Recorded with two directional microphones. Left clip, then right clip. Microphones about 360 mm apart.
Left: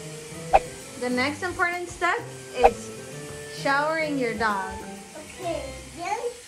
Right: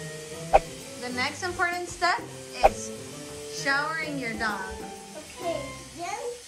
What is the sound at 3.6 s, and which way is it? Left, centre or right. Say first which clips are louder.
Child singing: left 4 dB; centre.